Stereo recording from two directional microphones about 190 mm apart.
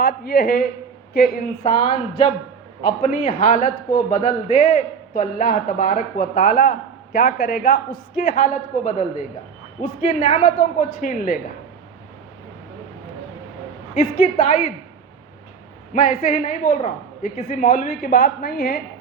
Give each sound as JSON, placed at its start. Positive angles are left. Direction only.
{"t": 0.0, "sound": "a man's voice", "side_deg": 55}
{"t": 1.7, "sound": "a woman's voice", "side_deg": 25}
{"t": 3.0, "sound": "a man's voice", "side_deg": 40}
{"t": 10.2, "sound": "a man's voice", "side_deg": 40}
{"t": 13.9, "sound": "a man's voice", "side_deg": 45}
{"t": 15.9, "sound": "a man's voice", "side_deg": 40}